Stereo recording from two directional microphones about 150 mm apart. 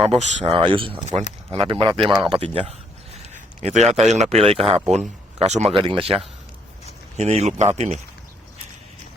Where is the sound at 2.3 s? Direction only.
35° right (ahead or behind).